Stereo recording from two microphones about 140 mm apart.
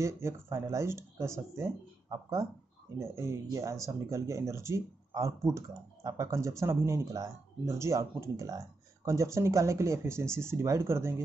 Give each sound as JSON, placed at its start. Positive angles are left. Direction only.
{"t": 0.0, "sound": "speech", "side_deg": -20}